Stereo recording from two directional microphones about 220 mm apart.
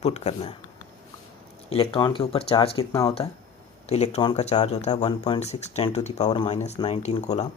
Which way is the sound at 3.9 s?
30° left (ahead or behind).